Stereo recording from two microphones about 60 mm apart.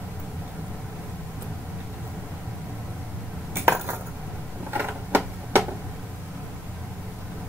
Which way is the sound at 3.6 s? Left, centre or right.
Right.